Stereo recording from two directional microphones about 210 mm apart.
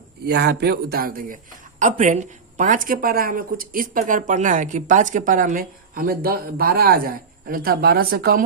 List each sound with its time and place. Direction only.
0.3 s a man's voice: 50° right (ahead or behind)